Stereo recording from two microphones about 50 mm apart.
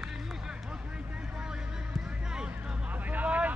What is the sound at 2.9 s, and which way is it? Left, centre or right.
Vehicle, right.